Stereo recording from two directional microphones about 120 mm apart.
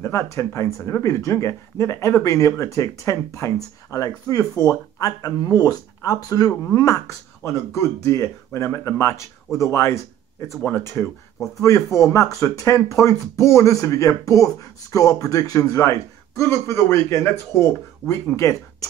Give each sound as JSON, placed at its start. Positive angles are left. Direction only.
{"t": 0.0, "sound": "speech", "side_deg": 20}